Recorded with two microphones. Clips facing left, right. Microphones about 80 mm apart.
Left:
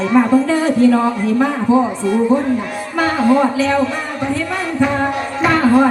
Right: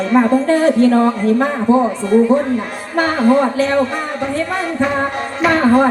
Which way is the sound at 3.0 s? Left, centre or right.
Right.